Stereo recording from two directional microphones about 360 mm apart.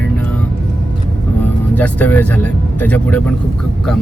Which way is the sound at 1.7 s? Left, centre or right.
Centre.